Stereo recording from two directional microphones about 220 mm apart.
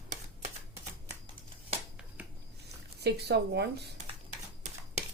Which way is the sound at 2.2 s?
5° right (ahead or behind).